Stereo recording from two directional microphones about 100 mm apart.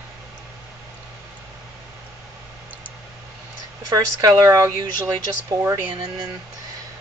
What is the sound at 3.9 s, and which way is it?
A woman's voice, 35° right (ahead or behind).